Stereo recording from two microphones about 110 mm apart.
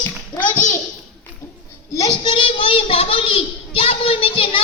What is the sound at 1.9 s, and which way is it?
Child singing, 30° left (ahead or behind).